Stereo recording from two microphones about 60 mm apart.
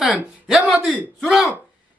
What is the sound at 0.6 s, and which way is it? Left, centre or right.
Speech, right.